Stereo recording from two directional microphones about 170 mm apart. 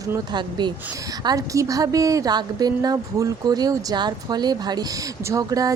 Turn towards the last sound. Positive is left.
turn(degrees=-20)  # may be behind; listen again after turning